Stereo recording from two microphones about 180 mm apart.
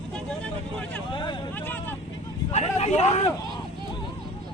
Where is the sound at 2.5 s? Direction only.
40° left (ahead or behind).